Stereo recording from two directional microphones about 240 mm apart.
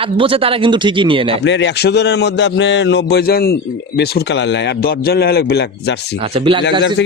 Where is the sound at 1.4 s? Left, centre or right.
Left.